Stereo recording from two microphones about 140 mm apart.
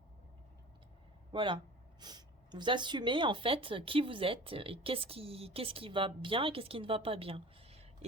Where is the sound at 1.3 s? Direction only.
35° right (ahead or behind).